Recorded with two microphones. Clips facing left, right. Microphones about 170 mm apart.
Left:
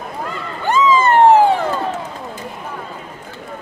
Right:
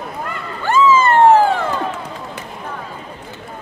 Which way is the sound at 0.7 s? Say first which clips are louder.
Right 1 dB; 15° left (ahead or behind).